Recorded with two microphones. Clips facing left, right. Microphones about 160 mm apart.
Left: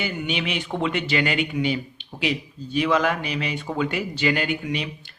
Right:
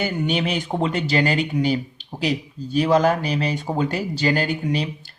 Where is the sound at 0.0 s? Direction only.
40° right (ahead or behind).